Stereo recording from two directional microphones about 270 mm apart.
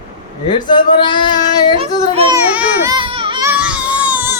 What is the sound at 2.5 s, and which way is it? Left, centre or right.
Baby cry, centre.